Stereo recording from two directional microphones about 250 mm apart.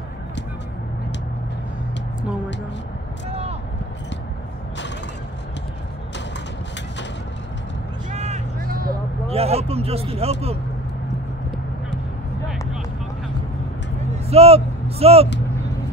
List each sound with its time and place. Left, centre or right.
3.3 s a sound: right
8.1 s vehicle: right
9.3 s speech: right
14.3 s speech: right